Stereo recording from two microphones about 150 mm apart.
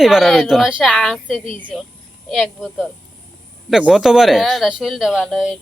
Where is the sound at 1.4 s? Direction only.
35° right (ahead or behind).